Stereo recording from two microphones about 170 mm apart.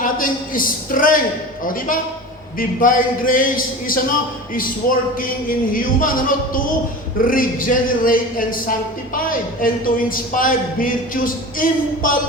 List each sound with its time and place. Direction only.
0.0 s a man's voice: 55° left (ahead or behind)